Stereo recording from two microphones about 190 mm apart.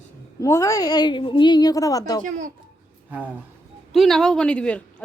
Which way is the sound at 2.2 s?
40° right (ahead or behind).